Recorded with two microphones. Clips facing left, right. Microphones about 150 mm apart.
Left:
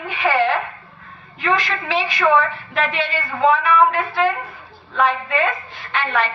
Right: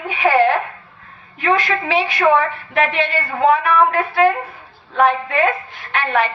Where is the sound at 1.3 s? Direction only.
55° right (ahead or behind).